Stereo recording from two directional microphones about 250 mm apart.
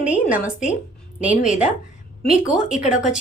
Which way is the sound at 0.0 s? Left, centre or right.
Centre.